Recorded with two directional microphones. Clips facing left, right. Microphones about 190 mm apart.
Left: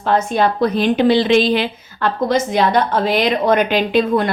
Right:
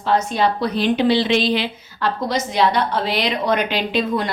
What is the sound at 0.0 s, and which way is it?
A woman's voice, 50° left (ahead or behind).